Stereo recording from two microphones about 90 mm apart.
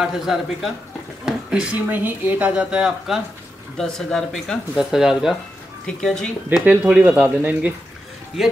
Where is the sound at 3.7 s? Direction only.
5° left (ahead or behind).